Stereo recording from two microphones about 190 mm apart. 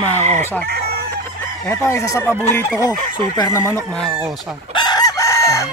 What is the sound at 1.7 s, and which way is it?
Chicken, 15° left (ahead or behind).